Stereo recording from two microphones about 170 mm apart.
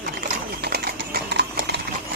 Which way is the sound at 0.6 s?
65° right (ahead or behind).